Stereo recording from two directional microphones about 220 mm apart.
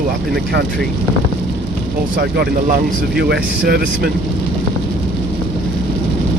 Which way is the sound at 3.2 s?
45° right (ahead or behind).